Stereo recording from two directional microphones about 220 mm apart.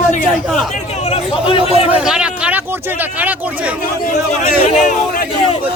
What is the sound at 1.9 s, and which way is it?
Speech, 5° right (ahead or behind).